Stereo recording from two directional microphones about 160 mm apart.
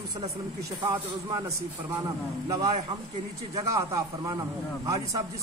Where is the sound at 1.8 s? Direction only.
20° right (ahead or behind).